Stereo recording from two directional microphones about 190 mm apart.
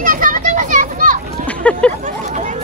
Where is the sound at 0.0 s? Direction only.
45° right (ahead or behind).